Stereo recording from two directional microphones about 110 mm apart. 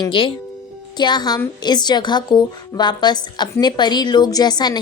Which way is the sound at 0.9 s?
40° left (ahead or behind).